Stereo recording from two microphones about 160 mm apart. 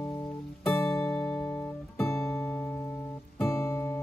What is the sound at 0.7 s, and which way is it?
Music, 15° left (ahead or behind).